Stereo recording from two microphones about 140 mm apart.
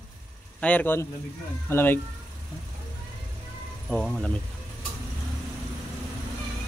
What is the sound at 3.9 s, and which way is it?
Speech, 5° left (ahead or behind).